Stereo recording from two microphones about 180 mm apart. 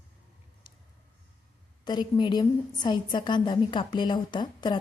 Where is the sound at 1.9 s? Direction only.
25° left (ahead or behind).